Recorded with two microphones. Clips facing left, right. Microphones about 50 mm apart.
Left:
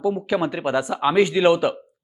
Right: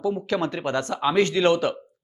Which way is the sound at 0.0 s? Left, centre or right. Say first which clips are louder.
Left 3 dB; centre.